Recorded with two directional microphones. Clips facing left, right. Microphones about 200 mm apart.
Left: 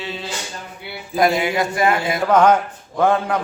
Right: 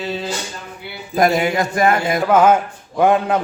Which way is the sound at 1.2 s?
45° right (ahead or behind).